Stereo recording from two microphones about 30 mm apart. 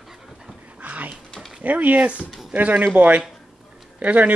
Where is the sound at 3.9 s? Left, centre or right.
Right.